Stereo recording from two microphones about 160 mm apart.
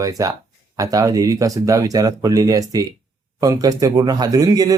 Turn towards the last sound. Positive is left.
turn(degrees=-20)  # may be behind; listen again after turning